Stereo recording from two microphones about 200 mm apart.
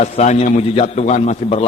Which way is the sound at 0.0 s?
35° left (ahead or behind).